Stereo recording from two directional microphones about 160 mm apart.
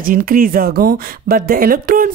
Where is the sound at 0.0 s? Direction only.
60° right (ahead or behind).